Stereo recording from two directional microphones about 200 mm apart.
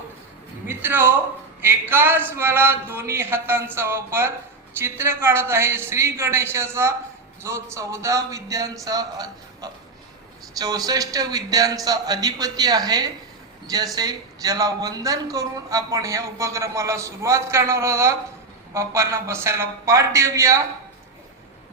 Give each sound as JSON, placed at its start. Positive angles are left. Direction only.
{"t": 0.7, "sound": "a man's voice", "side_deg": -10}